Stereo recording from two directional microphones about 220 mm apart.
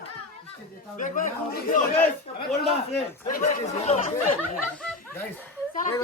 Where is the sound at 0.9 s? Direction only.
35° left (ahead or behind).